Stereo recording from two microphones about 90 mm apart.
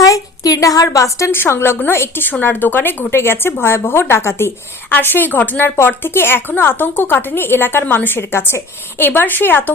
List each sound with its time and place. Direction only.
0.0 s a woman's voice: 40° left (ahead or behind); by 9.7 s 20° left (ahead or behind)